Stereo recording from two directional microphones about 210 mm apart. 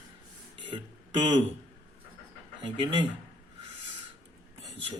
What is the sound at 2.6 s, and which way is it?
Speech, 20° right (ahead or behind).